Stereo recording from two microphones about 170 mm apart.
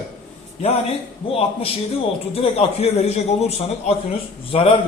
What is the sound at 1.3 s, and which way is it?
A man's voice, 35° left (ahead or behind).